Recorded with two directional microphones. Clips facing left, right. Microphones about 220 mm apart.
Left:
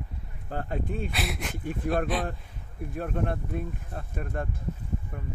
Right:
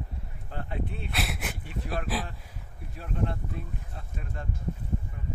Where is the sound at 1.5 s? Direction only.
50° left (ahead or behind).